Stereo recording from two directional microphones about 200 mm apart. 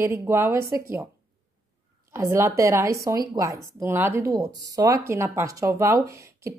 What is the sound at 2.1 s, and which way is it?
Speech, 15° right (ahead or behind).